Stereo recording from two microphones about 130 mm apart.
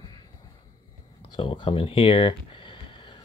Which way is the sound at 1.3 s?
40° left (ahead or behind).